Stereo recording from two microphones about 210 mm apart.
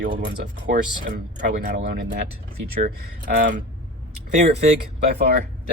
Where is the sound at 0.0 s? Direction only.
40° right (ahead or behind).